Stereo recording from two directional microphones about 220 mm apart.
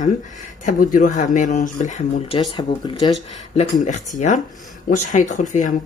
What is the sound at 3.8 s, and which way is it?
Speech, 35° left (ahead or behind).